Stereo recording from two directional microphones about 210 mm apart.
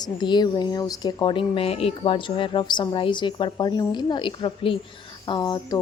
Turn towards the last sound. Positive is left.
turn(degrees=20)  # may be behind; listen again after turning